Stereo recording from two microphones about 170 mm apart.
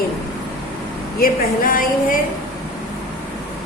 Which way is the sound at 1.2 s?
55° left (ahead or behind).